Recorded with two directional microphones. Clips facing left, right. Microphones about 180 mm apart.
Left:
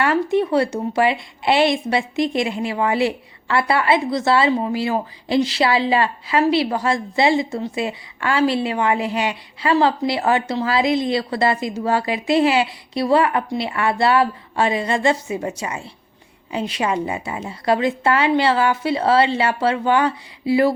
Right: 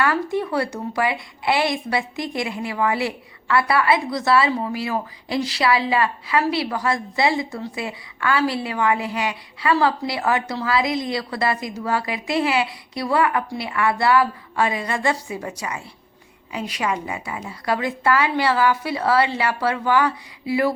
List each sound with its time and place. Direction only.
0.0 s a woman's voice: 25° left (ahead or behind)